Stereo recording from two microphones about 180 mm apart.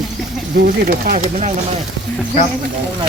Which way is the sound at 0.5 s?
55° right (ahead or behind).